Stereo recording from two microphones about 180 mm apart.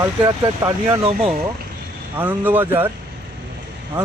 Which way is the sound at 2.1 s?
10° right (ahead or behind).